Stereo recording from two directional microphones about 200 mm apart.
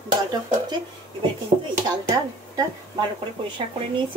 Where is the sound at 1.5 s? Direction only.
30° right (ahead or behind).